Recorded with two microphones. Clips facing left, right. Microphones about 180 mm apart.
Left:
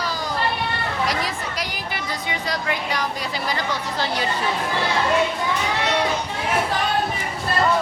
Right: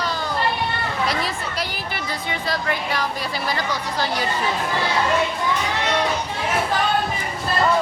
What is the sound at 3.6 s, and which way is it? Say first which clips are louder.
Chatter: right 1 dB; 25° left (ahead or behind).